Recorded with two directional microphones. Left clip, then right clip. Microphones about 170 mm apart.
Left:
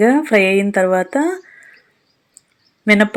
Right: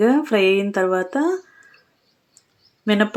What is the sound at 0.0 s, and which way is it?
A woman's voice, 10° left (ahead or behind).